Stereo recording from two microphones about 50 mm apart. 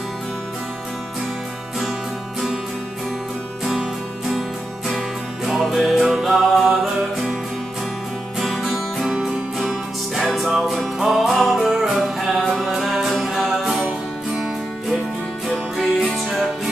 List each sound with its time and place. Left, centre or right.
4.3 s music: centre
8.4 s music: centre
9.1 s music: centre
9.6 s music: centre
16.1 s music: centre